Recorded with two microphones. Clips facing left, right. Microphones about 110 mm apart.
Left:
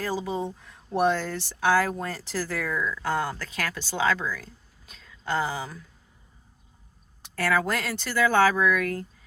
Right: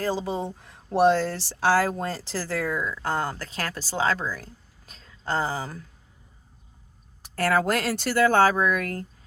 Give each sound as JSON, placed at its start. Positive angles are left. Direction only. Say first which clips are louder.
{"t": 0.3, "sound": "speech", "louder": "even", "side_deg": -35}
{"t": 7.2, "sound": "a sound", "louder": "right 2 dB", "side_deg": -50}
{"t": 7.6, "sound": "speech", "louder": "right 4 dB", "side_deg": -70}
{"t": 8.2, "sound": "speech", "louder": "right 1 dB", "side_deg": -45}